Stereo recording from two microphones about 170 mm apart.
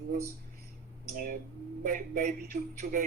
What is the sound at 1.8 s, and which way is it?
Speech, 50° right (ahead or behind).